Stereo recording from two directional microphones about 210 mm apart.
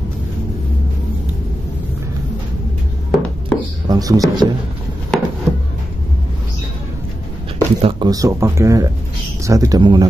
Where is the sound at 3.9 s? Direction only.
15° right (ahead or behind).